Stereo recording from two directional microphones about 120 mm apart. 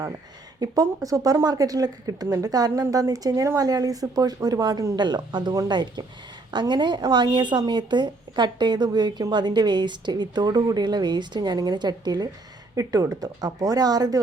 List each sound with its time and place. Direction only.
0.6 s speech: 30° right (ahead or behind)